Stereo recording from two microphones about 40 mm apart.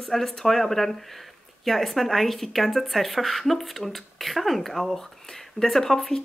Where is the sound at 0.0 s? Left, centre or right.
Centre.